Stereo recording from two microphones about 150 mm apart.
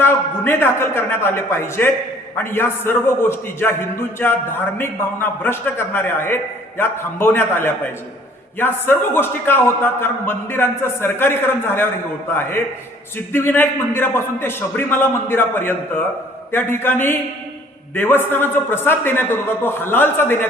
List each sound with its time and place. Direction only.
0.0 s a man's voice: 15° left (ahead or behind)